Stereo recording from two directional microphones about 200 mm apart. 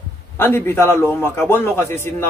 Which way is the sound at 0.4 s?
10° left (ahead or behind).